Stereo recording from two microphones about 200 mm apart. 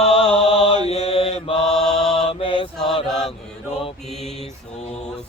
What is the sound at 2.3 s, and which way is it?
Mantra, 25° left (ahead or behind).